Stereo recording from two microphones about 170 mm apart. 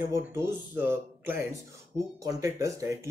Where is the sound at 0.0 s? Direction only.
15° right (ahead or behind).